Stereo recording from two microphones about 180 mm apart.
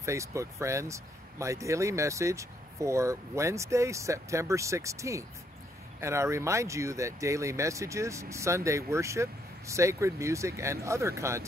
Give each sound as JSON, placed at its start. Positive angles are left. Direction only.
{"t": 0.0, "sound": "speech", "side_deg": -15}